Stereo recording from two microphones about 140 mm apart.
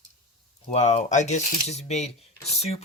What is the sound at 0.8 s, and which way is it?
Speech, 60° left (ahead or behind).